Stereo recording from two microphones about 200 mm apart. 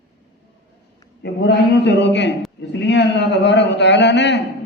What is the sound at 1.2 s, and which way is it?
A man's voice, 60° left (ahead or behind).